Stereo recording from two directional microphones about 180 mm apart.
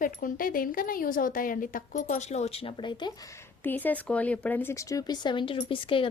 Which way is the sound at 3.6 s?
10° left (ahead or behind).